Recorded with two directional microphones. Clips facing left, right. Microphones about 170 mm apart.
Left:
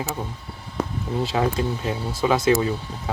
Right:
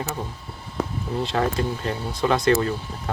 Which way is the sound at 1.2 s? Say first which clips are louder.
Left 1 dB; 5° left (ahead or behind).